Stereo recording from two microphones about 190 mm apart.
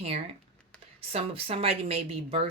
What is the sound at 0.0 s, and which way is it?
A woman's voice, 30° right (ahead or behind).